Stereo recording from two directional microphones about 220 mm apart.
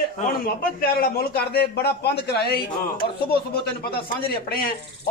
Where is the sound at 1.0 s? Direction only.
45° left (ahead or behind).